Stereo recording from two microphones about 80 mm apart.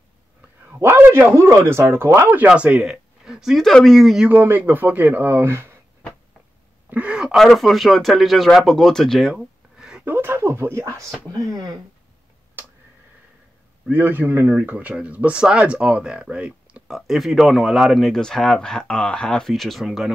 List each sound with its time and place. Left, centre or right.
0.7 s a man's voice: right
2.3 s speech: centre
4.3 s speech: right
6.9 s a sound: centre
7.3 s speech: centre
9.3 s a sound: centre
10.0 s speech: right
11.5 s speech: right
13.8 s speech: right; by 20.1 s centre